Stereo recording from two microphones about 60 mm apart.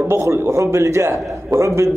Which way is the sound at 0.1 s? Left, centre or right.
Right.